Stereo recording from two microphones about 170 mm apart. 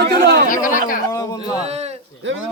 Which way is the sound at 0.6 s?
50° left (ahead or behind).